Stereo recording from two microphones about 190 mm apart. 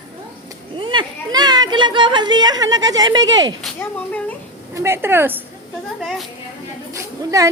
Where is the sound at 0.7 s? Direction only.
25° right (ahead or behind).